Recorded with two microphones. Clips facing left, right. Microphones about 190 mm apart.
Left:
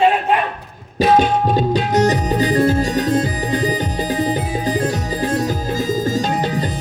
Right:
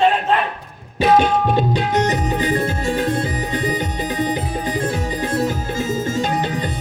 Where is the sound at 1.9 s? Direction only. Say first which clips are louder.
Left 5 dB; 35° left (ahead or behind).